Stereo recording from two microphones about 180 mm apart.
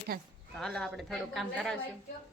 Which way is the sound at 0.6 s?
5° left (ahead or behind).